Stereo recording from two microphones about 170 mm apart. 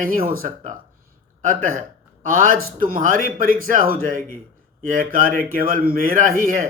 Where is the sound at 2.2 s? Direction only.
55° right (ahead or behind).